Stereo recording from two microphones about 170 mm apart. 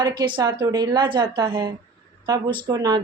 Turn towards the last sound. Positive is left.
turn(degrees=-25)  # may be behind; listen again after turning